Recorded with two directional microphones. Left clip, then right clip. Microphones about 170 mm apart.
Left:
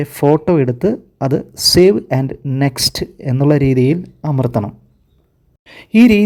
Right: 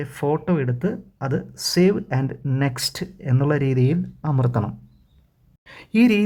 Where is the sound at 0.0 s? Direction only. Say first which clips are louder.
Left 10 dB; 25° left (ahead or behind).